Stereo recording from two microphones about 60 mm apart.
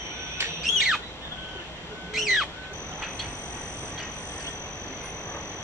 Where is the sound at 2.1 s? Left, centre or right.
Centre.